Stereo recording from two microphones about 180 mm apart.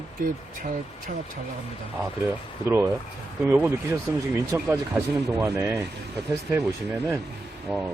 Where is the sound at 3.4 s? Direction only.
10° right (ahead or behind).